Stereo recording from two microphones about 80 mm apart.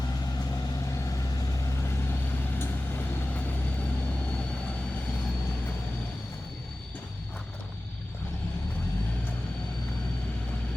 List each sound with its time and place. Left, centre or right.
1.0 s vehicle: left